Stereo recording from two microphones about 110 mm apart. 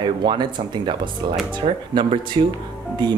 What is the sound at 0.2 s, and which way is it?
Speech, 45° right (ahead or behind).